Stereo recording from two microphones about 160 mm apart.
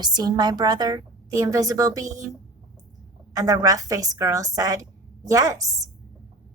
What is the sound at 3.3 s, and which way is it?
A woman's voice, 20° right (ahead or behind).